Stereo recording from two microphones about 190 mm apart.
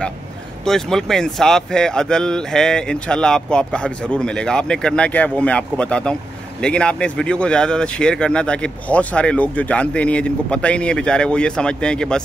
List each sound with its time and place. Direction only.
0.7 s speech: centre (ahead or behind)